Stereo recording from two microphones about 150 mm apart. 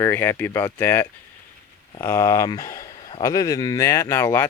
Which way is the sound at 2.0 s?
20° left (ahead or behind).